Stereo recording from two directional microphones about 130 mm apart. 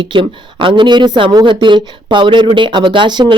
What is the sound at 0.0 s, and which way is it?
Speech, 40° right (ahead or behind).